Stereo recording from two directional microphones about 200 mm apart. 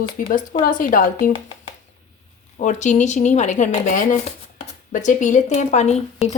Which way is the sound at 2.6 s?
35° left (ahead or behind).